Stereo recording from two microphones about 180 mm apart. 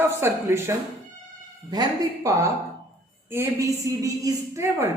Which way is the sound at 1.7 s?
20° right (ahead or behind).